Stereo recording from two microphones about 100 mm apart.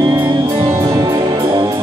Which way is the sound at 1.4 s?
50° right (ahead or behind).